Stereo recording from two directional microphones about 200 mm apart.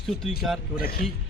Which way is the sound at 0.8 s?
50° left (ahead or behind).